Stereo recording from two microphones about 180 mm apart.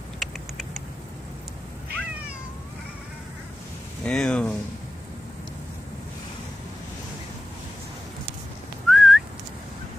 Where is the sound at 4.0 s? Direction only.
5° left (ahead or behind).